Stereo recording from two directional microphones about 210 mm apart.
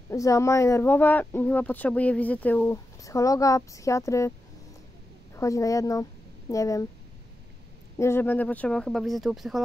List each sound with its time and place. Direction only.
0.1 s speech: 15° left (ahead or behind)
5.3 s speech: 15° left (ahead or behind)
8.0 s speech: 10° left (ahead or behind)